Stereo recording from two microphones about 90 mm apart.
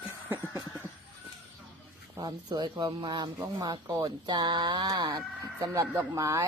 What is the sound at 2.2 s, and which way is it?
Speech, 50° right (ahead or behind).